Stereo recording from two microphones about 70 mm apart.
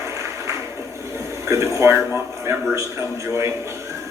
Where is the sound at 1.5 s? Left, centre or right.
Right.